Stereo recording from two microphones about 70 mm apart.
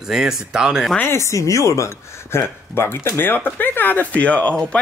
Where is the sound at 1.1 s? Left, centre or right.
Left.